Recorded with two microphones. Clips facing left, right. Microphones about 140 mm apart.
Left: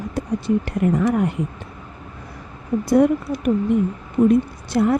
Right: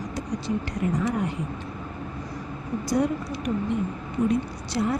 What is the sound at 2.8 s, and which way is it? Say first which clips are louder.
A woman's voice: left 9 dB; 60° left (ahead or behind).